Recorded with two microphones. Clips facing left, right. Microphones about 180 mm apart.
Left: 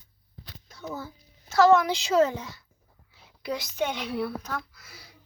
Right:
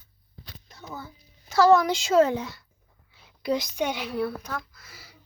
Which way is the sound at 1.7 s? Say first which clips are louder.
Right 2 dB; 40° right (ahead or behind).